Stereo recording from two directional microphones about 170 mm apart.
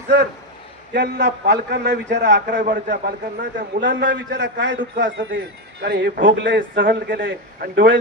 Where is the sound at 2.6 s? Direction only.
50° right (ahead or behind).